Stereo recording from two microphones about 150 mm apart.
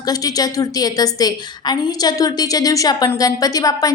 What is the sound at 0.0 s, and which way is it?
A woman's voice, 25° left (ahead or behind).